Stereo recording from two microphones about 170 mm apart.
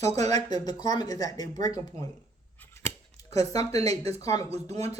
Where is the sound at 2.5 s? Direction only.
15° left (ahead or behind).